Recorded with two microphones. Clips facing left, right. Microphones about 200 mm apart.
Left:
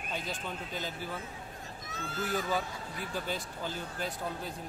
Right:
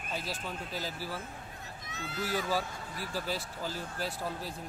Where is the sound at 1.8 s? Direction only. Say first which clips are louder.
Even; 45° left (ahead or behind).